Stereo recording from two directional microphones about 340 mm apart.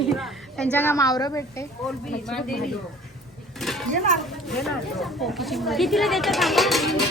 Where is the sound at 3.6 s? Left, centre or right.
Centre.